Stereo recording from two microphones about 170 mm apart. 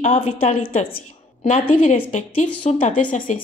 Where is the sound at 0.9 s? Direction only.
40° left (ahead or behind).